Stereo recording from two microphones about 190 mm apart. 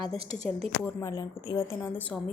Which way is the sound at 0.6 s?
15° left (ahead or behind).